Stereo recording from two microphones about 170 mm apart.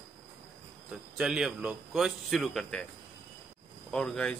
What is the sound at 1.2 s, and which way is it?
Speech, 5° right (ahead or behind).